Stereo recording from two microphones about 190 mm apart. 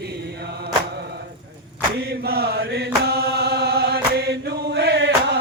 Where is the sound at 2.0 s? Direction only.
55° right (ahead or behind).